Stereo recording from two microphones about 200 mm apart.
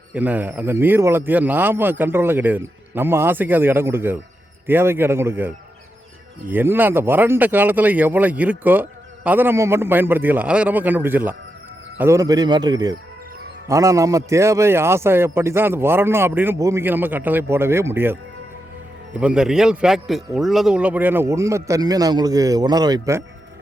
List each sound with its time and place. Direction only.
0.1 s speech: 10° right (ahead or behind)
6.5 s speech: 10° right (ahead or behind)
19.2 s speech: 5° right (ahead or behind)